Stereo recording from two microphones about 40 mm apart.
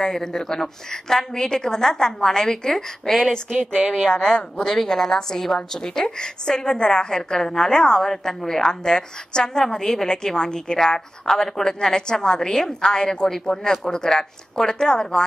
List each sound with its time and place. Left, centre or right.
0.0 s a woman's voice: centre
4.0 s a woman's voice: centre
13.3 s a woman's voice: centre